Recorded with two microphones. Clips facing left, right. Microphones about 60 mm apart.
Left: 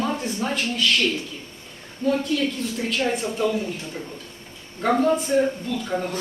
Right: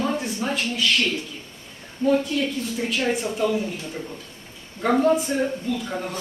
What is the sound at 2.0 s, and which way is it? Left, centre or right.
Speech, centre.